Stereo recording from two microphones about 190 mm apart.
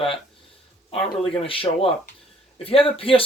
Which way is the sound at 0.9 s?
30° left (ahead or behind).